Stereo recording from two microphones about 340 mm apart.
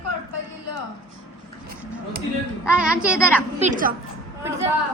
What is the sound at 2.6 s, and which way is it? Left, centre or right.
Speech, centre.